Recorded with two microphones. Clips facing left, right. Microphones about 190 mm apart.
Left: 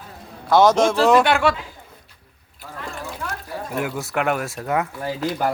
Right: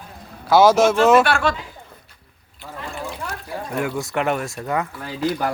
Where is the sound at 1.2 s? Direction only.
15° left (ahead or behind).